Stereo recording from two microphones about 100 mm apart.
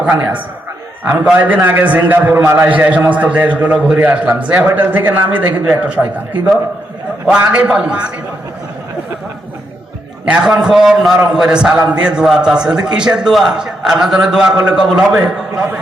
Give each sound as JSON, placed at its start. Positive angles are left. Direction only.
{"t": 0.0, "sound": "a man's voice", "side_deg": -15}
{"t": 10.2, "sound": "a man's voice", "side_deg": -10}